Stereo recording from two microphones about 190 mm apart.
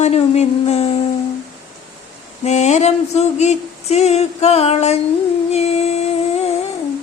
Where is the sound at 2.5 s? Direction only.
35° left (ahead or behind).